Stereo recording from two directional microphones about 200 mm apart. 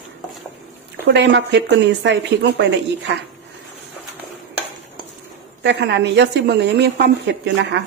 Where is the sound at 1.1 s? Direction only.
60° right (ahead or behind).